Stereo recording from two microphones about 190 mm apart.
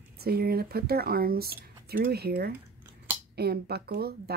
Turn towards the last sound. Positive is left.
turn(degrees=-55)  # may be behind; listen again after turning